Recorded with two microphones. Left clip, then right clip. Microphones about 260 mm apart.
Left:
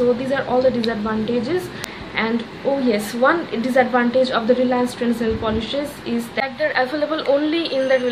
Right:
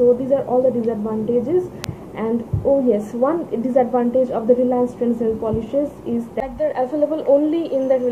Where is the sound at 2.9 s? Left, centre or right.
Left.